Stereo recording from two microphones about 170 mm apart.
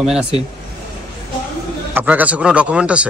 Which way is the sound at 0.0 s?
5° right (ahead or behind).